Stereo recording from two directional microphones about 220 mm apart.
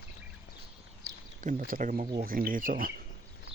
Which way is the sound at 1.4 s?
35° right (ahead or behind).